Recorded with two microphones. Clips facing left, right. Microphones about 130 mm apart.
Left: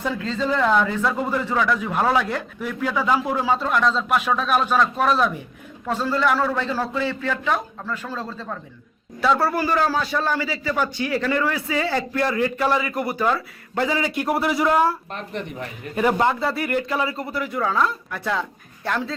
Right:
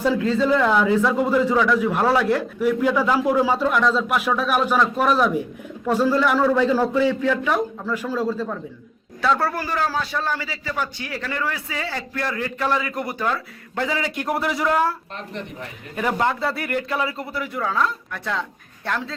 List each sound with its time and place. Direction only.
0.2 s a man's voice: 5° right (ahead or behind)
9.2 s a man's voice: 5° left (ahead or behind); by 12.5 s 20° left (ahead or behind)
12.5 s a man's voice: 10° left (ahead or behind)
16.0 s a man's voice: 5° left (ahead or behind)